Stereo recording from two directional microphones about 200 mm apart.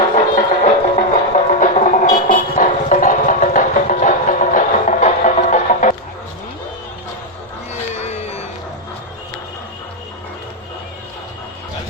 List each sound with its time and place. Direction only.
0.3 s music: 35° left (ahead or behind)
8.0 s music: 30° left (ahead or behind)